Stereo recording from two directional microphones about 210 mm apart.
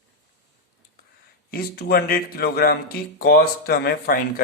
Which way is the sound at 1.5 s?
45° left (ahead or behind).